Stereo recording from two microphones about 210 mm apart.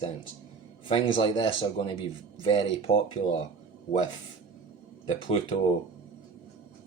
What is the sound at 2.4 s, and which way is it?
Speech, 25° left (ahead or behind).